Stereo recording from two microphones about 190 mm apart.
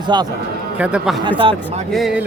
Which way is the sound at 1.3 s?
25° right (ahead or behind).